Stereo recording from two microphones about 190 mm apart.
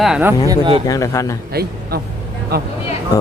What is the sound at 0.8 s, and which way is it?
Speech, 15° left (ahead or behind).